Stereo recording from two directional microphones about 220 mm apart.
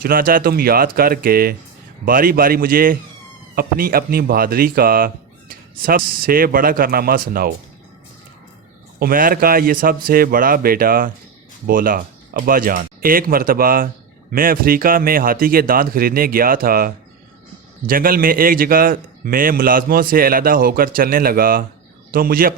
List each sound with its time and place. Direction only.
0.0 s speech: 40° right (ahead or behind)
9.0 s speech: 40° right (ahead or behind)